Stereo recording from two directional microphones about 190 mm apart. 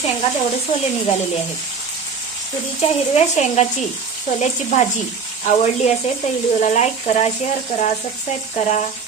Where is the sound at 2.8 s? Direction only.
35° left (ahead or behind).